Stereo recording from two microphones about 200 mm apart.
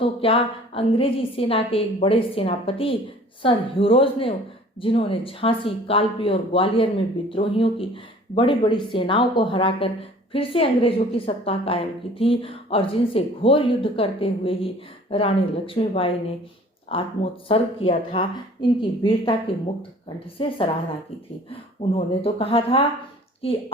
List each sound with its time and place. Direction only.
0.0 s a woman's voice: 25° left (ahead or behind)
17.5 s a woman's voice: 25° left (ahead or behind)